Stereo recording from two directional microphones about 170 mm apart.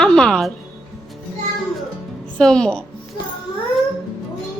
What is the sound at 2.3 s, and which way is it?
Speech, 5° left (ahead or behind).